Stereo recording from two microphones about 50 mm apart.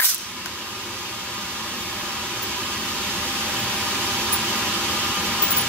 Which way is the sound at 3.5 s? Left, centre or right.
Centre.